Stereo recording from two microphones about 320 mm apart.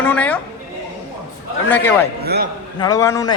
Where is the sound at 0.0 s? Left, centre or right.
Centre.